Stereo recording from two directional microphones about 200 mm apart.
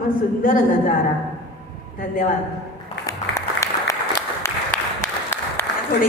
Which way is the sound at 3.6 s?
15° left (ahead or behind).